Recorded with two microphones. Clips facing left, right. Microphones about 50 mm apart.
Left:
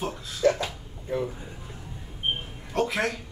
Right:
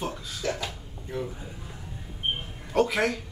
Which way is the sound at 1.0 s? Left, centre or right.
Left.